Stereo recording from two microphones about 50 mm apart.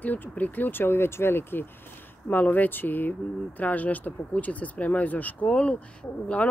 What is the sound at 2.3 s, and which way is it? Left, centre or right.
Speech, left.